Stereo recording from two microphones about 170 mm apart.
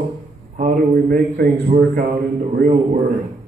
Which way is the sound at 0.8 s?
60° right (ahead or behind).